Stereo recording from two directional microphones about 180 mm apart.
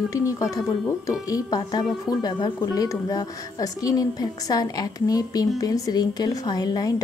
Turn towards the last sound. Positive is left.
turn(degrees=20)  # may be behind; listen again after turning